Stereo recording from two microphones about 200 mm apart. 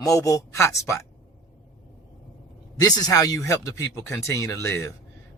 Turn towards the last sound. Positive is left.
turn(degrees=15)  # may be behind; listen again after turning